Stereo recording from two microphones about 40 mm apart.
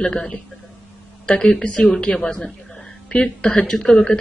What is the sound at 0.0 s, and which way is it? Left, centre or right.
A woman's voice, left.